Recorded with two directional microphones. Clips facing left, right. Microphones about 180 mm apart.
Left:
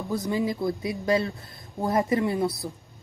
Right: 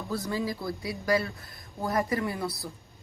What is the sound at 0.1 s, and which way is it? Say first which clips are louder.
A woman's voice: left 4 dB; 20° left (ahead or behind).